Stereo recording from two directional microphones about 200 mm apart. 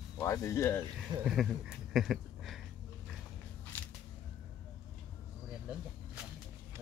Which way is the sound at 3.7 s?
10° left (ahead or behind).